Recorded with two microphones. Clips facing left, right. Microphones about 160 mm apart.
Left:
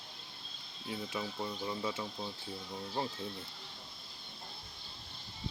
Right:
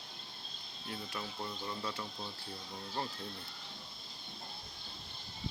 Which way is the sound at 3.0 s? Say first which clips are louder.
Left 3 dB; 20° left (ahead or behind).